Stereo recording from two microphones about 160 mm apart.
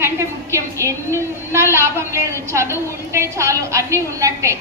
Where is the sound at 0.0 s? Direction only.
20° right (ahead or behind).